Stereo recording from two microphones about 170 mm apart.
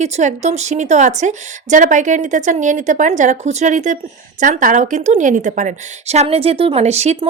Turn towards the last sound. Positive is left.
turn(degrees=-40)  # may be behind; listen again after turning